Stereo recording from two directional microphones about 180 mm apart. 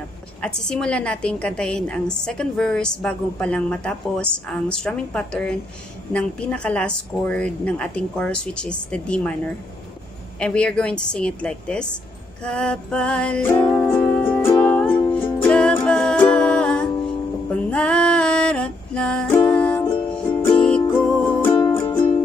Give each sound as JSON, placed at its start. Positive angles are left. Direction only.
{"t": 0.4, "sound": "a woman's voice", "side_deg": 5}
{"t": 12.4, "sound": "music", "side_deg": 5}
{"t": 17.5, "sound": "female singing", "side_deg": 5}
{"t": 19.8, "sound": "music", "side_deg": 30}
{"t": 20.4, "sound": "music", "side_deg": 5}